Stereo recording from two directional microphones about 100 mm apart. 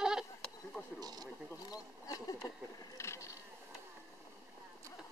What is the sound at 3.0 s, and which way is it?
Vehicle, 30° left (ahead or behind).